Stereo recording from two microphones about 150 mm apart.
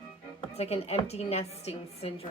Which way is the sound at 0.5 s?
45° left (ahead or behind).